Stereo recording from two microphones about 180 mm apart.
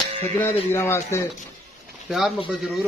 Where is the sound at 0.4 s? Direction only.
15° left (ahead or behind).